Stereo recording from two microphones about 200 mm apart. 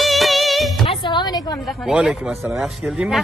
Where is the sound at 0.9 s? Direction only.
25° left (ahead or behind).